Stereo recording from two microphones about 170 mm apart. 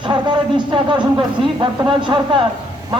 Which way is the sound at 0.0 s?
30° right (ahead or behind).